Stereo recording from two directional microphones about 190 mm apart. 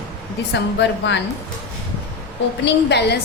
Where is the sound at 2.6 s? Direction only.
60° left (ahead or behind).